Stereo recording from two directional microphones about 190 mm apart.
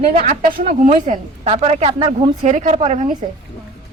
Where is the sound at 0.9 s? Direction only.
35° right (ahead or behind).